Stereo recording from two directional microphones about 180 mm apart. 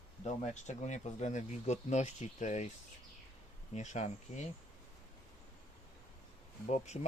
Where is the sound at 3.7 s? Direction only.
40° left (ahead or behind).